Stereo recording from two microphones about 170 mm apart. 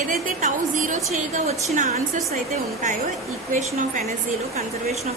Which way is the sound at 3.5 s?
50° right (ahead or behind).